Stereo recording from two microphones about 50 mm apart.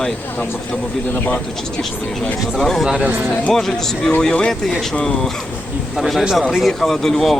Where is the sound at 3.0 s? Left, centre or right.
Right.